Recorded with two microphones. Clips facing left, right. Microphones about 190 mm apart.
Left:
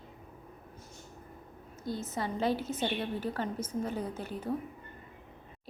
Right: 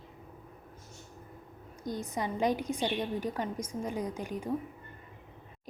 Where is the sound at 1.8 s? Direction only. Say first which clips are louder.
Right 1 dB; 15° right (ahead or behind).